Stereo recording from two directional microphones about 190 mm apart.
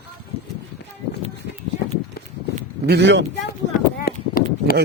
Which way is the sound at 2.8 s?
65° right (ahead or behind).